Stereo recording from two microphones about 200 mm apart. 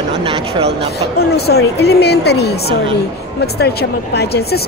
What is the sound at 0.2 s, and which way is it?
Speech, 30° right (ahead or behind).